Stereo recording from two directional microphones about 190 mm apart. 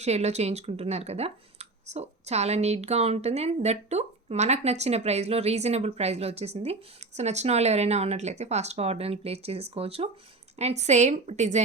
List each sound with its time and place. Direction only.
0.0 s speech: 35° right (ahead or behind)